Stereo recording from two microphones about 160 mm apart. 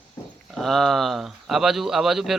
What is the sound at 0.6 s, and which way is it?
Speech, centre (ahead or behind).